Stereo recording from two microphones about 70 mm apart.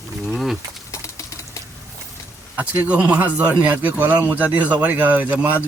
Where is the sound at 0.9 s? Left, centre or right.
Left.